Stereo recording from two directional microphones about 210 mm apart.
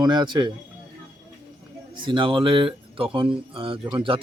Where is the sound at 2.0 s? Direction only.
25° right (ahead or behind).